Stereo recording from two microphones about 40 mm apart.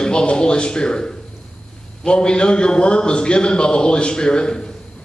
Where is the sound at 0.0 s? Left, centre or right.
Left.